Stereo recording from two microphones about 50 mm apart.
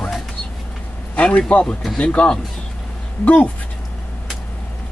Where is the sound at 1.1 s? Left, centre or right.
Left.